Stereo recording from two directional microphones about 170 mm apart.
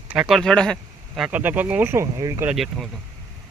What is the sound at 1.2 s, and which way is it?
Speech, 10° right (ahead or behind).